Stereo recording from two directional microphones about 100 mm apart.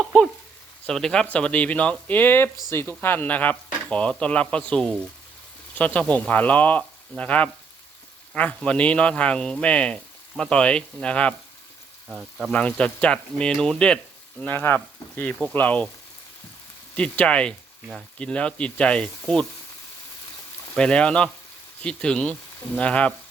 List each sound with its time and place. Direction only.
0.0 s speech: 5° left (ahead or behind)
12.0 s speech: 5° right (ahead or behind)
12.5 s speech: 10° left (ahead or behind)
14.4 s speech: 20° left (ahead or behind)
16.9 s speech: 10° left (ahead or behind)
20.7 s speech: 10° left (ahead or behind)